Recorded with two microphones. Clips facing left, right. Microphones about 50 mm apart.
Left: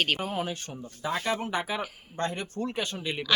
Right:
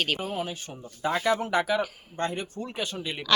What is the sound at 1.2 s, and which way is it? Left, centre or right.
Speech, right.